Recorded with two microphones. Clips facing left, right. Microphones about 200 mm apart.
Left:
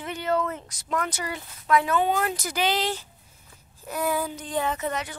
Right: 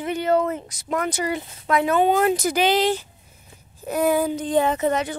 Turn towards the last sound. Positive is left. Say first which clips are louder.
# right 7 dB
turn(degrees=-25)  # may be behind; listen again after turning